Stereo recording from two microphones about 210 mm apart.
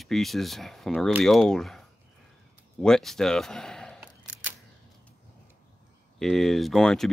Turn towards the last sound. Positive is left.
turn(degrees=0)  # may be behind; listen again after turning